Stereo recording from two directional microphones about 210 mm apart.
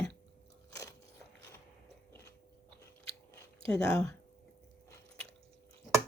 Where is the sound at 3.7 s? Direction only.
5° left (ahead or behind).